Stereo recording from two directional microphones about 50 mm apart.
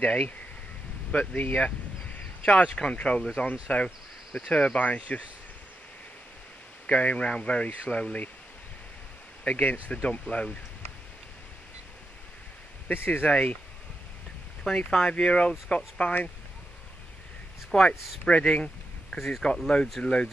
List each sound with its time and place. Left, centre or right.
0.0 s speech: left
1.6 s a sound: left
2.7 s speech: left
6.9 s speech: left
9.4 s speech: left
9.9 s speech: left
12.9 s speech: left
13.3 s speech: left
14.6 s speech: left
17.8 s speech: left
19.1 s speech: centre